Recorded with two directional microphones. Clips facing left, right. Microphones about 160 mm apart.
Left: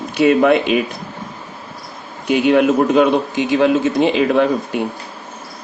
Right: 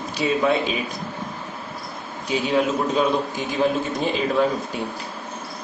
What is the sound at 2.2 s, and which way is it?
A man's voice, 65° left (ahead or behind).